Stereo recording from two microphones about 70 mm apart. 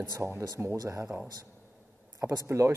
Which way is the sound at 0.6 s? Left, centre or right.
Right.